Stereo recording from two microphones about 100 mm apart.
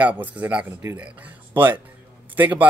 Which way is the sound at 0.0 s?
15° right (ahead or behind).